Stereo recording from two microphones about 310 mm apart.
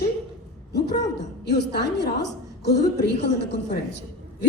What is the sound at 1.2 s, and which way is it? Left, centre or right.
A woman's voice, left.